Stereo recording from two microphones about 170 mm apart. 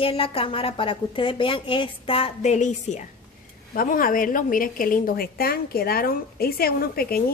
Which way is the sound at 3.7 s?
55° left (ahead or behind).